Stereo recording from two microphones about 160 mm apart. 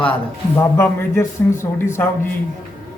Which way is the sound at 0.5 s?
15° left (ahead or behind).